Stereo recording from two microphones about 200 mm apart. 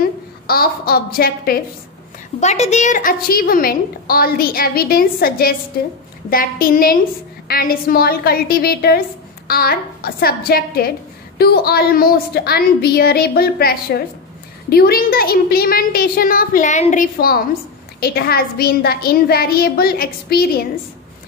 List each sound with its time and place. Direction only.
0.0 s a woman's voice: 50° left (ahead or behind)
2.4 s a woman's voice: 35° left (ahead or behind); by 20.6 s 50° left (ahead or behind)